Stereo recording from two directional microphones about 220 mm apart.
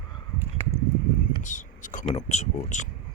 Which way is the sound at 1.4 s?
35° left (ahead or behind).